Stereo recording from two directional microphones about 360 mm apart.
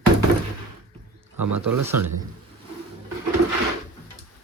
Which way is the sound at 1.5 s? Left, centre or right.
Right.